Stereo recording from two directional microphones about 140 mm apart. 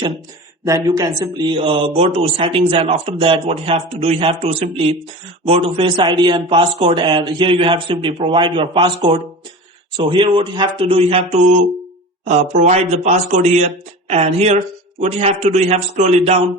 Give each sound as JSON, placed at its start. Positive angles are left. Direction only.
{"t": 0.6, "sound": "a man's voice", "side_deg": -25}
{"t": 12.2, "sound": "a man's voice", "side_deg": -55}